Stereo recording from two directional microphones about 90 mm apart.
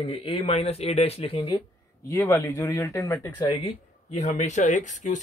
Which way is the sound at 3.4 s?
80° left.